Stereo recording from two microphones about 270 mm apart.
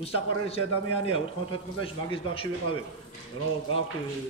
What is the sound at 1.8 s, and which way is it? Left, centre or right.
Speech, centre.